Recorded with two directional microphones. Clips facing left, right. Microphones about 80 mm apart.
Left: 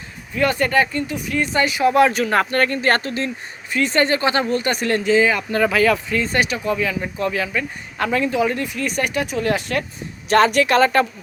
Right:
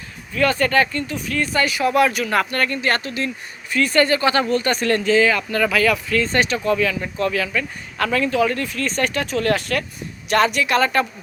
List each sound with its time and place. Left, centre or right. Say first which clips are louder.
0.3 s speech: even; centre
3.7 s speech: right 1 dB; left
10.2 s speech: left 3 dB; left